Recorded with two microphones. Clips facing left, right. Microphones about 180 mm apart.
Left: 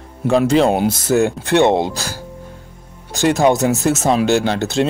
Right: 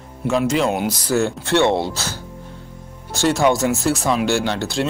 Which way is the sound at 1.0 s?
15° left (ahead or behind).